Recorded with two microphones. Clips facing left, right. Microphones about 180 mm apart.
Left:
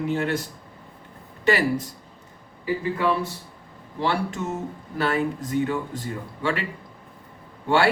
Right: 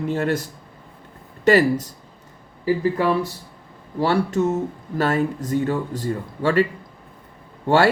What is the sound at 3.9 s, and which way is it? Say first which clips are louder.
Speech: right 6 dB; 40° right (ahead or behind).